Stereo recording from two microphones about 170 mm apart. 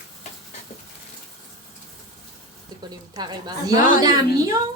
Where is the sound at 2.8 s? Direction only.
25° right (ahead or behind).